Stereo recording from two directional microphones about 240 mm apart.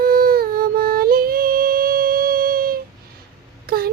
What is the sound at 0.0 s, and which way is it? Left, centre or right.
Music, right.